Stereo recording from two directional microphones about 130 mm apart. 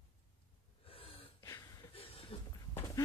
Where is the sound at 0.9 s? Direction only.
45° left (ahead or behind).